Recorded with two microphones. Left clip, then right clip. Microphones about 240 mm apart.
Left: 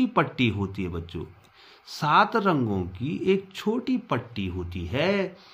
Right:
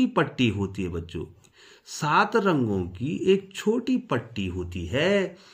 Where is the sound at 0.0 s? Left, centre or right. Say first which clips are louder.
Even; centre.